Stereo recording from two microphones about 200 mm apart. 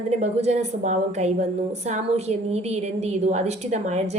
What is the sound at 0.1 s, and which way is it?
A woman's voice, 35° right (ahead or behind).